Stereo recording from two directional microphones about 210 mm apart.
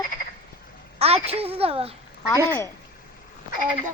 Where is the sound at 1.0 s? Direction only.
30° right (ahead or behind).